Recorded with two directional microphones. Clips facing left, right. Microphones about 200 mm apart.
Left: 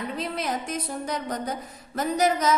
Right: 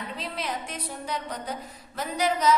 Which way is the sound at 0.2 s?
45° left (ahead or behind).